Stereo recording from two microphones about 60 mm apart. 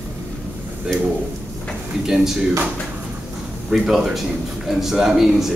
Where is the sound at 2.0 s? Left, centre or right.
Centre.